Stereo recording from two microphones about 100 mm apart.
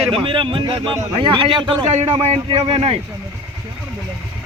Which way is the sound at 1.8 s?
80° right.